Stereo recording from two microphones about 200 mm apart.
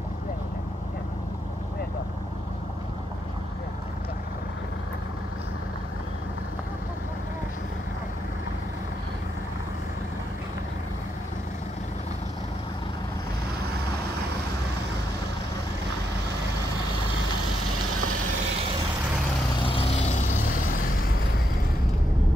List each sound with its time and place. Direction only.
17.6 s vehicle: 90° right
19.5 s vehicle: 25° left (ahead or behind); by 21.1 s 45° left (ahead or behind)